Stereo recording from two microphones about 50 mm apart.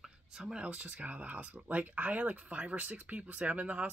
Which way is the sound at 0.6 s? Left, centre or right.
Right.